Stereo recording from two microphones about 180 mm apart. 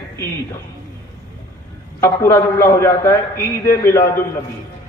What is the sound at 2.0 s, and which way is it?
A man's voice, 15° left (ahead or behind).